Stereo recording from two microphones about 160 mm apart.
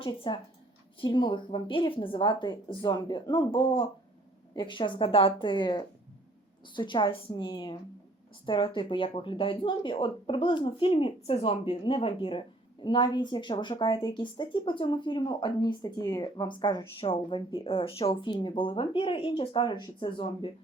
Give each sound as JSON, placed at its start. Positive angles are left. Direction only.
{"t": 0.3, "sound": "a woman's voice", "side_deg": 30}